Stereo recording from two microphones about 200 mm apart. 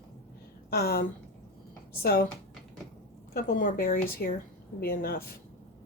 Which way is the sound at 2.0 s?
50° left (ahead or behind).